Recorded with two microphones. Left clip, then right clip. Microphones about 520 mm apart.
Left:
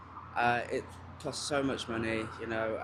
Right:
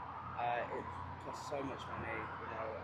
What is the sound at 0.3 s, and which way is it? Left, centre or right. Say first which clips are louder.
Speech: left 9 dB; left.